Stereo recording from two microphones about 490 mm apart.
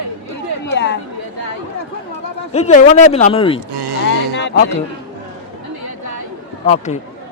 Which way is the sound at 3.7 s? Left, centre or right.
Right.